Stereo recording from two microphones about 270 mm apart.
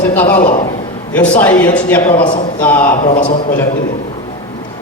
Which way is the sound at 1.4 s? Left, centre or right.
Centre.